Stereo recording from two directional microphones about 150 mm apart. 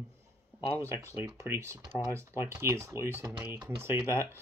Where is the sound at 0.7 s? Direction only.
20° right (ahead or behind).